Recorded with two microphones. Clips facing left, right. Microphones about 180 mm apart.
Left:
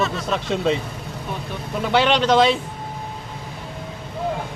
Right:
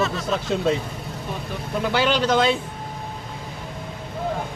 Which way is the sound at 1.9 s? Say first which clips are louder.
Left 4 dB; 65° left (ahead or behind).